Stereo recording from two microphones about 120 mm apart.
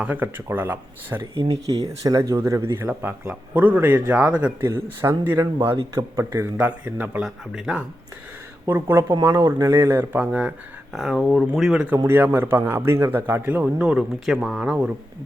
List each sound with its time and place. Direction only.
0.0 s a man's voice: 15° right (ahead or behind)
1.7 s a man's voice: 30° right (ahead or behind); by 4.7 s 10° right (ahead or behind)
4.7 s speech: 20° right (ahead or behind)
6.6 s a man's voice: 10° right (ahead or behind)
7.3 s speech: centre (ahead or behind)
8.6 s a man's voice: 20° right (ahead or behind)